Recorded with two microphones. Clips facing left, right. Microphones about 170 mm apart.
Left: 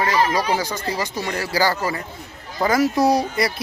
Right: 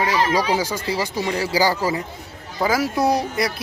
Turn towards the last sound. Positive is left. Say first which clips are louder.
# left 1 dB
turn(degrees=0)  # may be behind; listen again after turning